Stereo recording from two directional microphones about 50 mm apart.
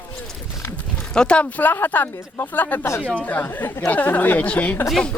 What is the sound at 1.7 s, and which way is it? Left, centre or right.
Speech, left.